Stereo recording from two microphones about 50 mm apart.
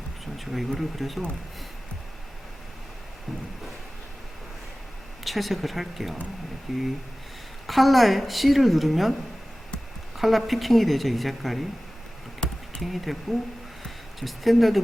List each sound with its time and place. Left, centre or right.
0.3 s a woman's voice: centre
5.2 s a woman's voice: centre
10.2 s a woman's voice: centre
12.4 s a sound: centre
12.8 s a woman's voice: centre